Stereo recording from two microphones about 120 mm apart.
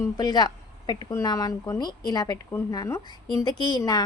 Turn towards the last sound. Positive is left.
turn(degrees=35)  # may be behind; listen again after turning